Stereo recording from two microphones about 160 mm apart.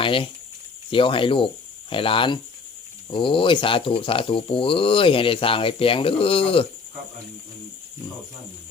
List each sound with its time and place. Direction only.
0.0 s speech: 35° left (ahead or behind)